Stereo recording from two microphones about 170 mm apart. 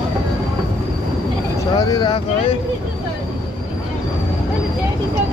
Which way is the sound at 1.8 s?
25° left (ahead or behind).